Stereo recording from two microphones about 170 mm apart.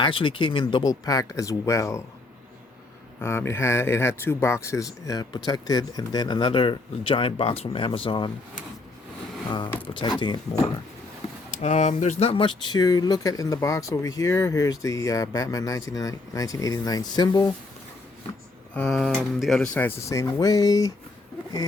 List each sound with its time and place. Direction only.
0.0 s speech: 30° left (ahead or behind)
3.2 s speech: 15° left (ahead or behind)
10.0 s speech: 25° left (ahead or behind)
11.5 s speech: 45° left (ahead or behind); by 17.5 s 20° left (ahead or behind)
18.7 s speech: 5° left (ahead or behind)